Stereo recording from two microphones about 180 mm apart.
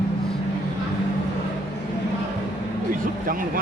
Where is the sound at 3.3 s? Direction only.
50° right (ahead or behind).